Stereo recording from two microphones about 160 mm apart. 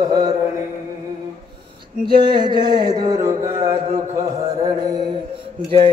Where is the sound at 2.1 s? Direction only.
30° right (ahead or behind).